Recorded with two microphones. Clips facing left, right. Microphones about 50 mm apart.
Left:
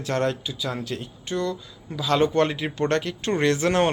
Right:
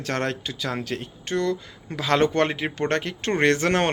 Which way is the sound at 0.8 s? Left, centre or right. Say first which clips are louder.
Right 1 dB; right.